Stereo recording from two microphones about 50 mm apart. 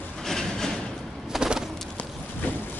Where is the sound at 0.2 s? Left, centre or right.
Centre.